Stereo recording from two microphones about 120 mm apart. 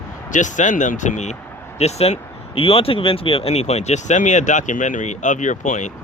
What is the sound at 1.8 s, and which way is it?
Speech, 60° left (ahead or behind).